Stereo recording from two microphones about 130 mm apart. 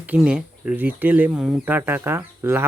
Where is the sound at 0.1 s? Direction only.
5° right (ahead or behind).